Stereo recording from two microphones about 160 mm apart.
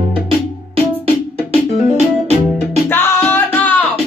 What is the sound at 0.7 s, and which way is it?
Music, 40° right (ahead or behind).